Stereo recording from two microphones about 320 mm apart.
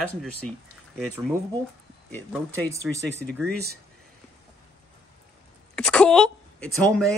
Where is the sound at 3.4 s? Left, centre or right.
Right.